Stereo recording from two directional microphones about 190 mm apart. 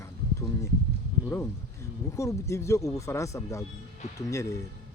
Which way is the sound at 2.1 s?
15° left (ahead or behind).